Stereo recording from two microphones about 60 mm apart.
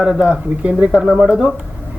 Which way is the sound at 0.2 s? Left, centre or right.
Right.